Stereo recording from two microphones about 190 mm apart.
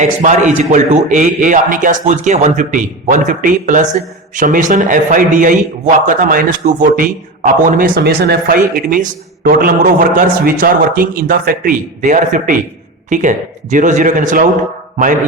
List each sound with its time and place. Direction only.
0.0 s a man's voice: 40° right (ahead or behind)